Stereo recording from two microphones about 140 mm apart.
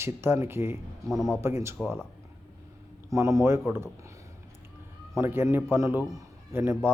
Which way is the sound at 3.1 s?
20° right (ahead or behind).